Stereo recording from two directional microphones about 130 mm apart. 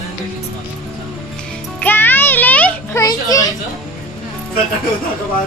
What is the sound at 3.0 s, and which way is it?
Speech, 30° left (ahead or behind).